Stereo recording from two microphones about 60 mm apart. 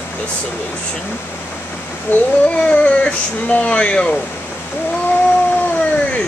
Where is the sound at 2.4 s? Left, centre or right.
Left.